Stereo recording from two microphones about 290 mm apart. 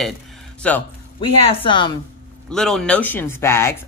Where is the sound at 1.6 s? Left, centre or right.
Centre.